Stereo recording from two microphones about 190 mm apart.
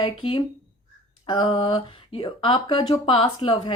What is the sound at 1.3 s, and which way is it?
Speech, 25° left (ahead or behind).